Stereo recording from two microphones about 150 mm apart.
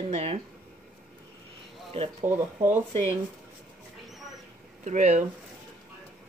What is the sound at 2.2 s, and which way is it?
Speech, 15° right (ahead or behind).